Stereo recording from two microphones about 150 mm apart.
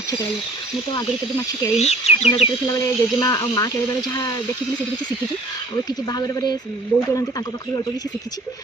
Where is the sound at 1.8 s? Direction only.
45° left (ahead or behind).